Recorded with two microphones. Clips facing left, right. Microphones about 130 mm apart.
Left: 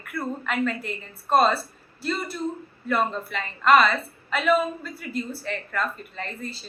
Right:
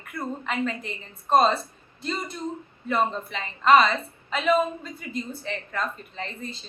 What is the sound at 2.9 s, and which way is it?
A woman's voice, 20° right (ahead or behind).